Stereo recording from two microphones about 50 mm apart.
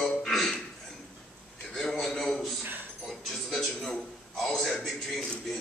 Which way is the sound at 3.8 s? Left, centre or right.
Centre.